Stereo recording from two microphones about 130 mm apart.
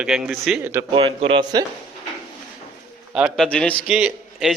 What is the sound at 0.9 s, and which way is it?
Speech, 45° right (ahead or behind).